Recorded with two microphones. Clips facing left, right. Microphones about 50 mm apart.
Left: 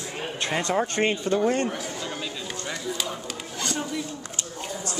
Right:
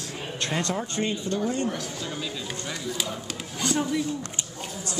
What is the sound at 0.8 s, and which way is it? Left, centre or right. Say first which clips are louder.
Speech: left 5 dB; left.